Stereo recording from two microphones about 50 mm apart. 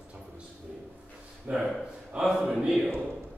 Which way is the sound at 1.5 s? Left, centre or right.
Right.